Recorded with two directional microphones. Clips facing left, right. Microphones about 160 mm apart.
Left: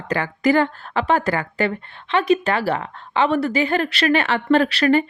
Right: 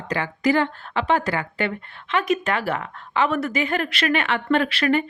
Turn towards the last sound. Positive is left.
turn(degrees=35)  # may be behind; listen again after turning